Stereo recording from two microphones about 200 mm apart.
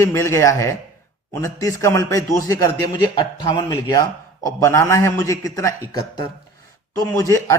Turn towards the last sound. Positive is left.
turn(degrees=15)  # may be behind; listen again after turning